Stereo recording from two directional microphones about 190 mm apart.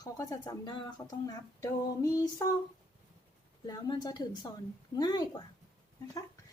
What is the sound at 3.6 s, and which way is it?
Speech, 20° left (ahead or behind).